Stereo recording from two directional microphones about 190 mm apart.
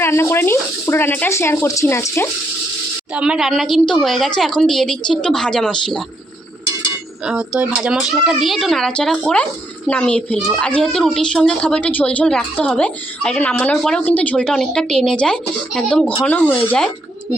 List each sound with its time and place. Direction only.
0.0 s speech: 15° left (ahead or behind)
3.2 s a child's voice: 5° right (ahead or behind)
7.3 s a child's voice: 5° right (ahead or behind)